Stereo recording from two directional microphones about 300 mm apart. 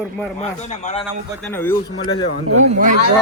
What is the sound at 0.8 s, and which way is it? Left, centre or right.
Speech, left.